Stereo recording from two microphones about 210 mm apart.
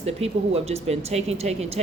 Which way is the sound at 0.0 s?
30° right (ahead or behind).